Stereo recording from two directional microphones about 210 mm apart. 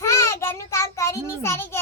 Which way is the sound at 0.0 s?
15° left (ahead or behind).